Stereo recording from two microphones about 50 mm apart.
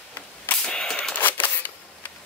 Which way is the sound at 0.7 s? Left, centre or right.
Centre.